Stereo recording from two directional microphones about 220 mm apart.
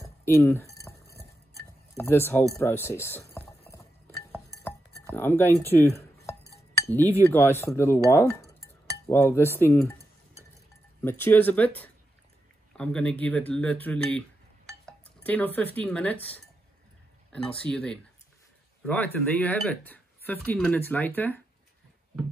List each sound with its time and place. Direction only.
0.0 s dishes: 10° left (ahead or behind)
0.9 s a sound: 10° left (ahead or behind)
2.0 s speech: 10° left (ahead or behind)
4.6 s dishes: 10° left (ahead or behind)
6.9 s speech: 10° left (ahead or behind)
17.6 s speech: 5° left (ahead or behind)